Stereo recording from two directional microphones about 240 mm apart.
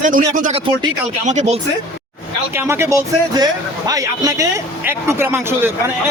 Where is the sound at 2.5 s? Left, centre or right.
Centre.